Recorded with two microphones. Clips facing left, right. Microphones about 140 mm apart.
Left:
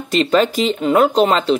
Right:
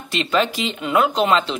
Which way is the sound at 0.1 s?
40° left (ahead or behind).